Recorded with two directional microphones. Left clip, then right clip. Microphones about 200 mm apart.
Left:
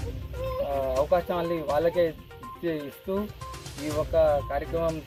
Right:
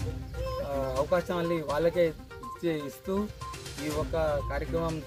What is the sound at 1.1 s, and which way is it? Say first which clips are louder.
Speech: left 3 dB; 10° right (ahead or behind).